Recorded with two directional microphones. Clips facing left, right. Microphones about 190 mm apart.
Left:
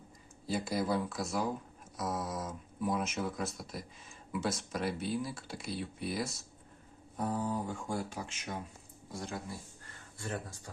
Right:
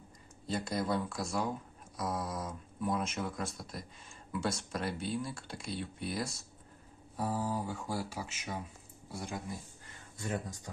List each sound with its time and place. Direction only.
0.4 s speech: 5° left (ahead or behind); by 10.4 s 20° right (ahead or behind)